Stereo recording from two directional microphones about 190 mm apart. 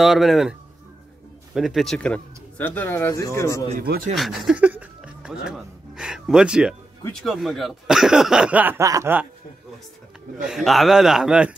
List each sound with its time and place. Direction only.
0.0 s speech: centre (ahead or behind); by 3.7 s 15° left (ahead or behind)
3.8 s speech: 55° right (ahead or behind)
4.1 s speech: centre (ahead or behind)
10.4 s speech: centre (ahead or behind)